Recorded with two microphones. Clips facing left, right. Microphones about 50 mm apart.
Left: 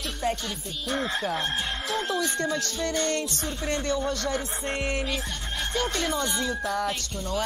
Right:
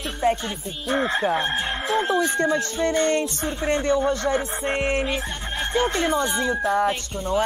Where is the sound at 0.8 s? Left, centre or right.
Right.